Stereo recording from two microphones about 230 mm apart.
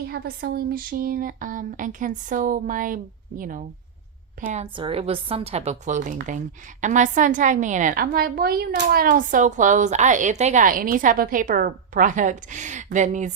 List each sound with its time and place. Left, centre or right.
0.1 s a woman's voice: right